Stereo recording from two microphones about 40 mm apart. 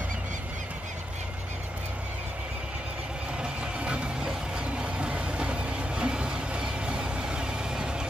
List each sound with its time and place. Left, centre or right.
3.8 s music: right
4.6 s vehicle: right